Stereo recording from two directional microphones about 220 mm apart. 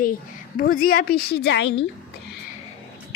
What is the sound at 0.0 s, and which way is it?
A woman's voice, 40° left (ahead or behind).